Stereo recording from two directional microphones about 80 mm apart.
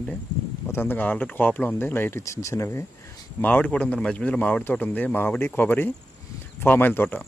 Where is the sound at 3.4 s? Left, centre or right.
Centre.